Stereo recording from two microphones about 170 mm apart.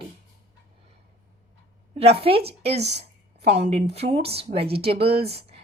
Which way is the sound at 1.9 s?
35° right (ahead or behind).